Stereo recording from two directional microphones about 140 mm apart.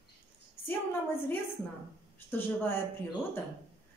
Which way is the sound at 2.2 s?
15° left (ahead or behind).